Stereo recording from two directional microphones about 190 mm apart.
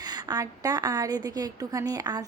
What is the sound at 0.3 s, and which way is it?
A woman's voice, 20° right (ahead or behind).